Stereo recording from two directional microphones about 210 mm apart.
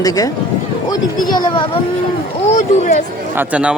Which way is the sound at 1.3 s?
20° left (ahead or behind).